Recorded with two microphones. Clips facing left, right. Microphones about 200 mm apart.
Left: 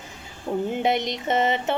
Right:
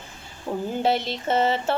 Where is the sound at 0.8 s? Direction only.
15° left (ahead or behind).